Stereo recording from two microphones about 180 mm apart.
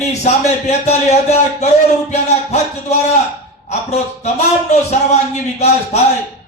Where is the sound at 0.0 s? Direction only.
40° left (ahead or behind).